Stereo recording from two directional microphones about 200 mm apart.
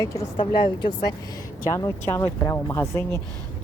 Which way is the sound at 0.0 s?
15° left (ahead or behind).